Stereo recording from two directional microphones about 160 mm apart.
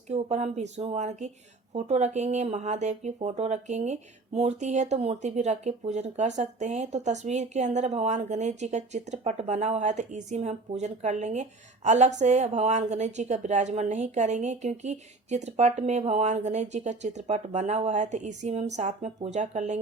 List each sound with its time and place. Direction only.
0.1 s speech: 45° right (ahead or behind)